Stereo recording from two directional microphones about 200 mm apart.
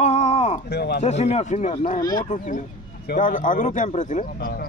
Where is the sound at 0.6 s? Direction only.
55° left (ahead or behind).